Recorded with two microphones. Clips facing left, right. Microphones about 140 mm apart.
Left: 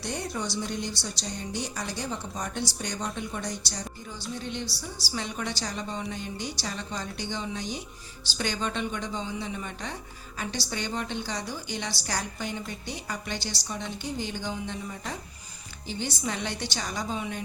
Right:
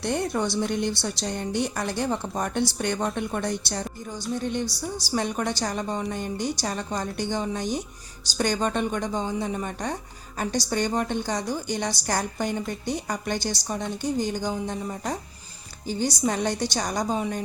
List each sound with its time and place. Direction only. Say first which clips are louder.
0.0 s a woman's voice: right 7 dB; 55° right (ahead or behind)